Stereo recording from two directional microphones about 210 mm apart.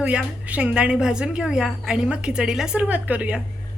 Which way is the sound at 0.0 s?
5° right (ahead or behind).